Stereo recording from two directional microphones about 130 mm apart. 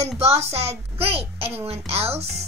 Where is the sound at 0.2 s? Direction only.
55° right (ahead or behind).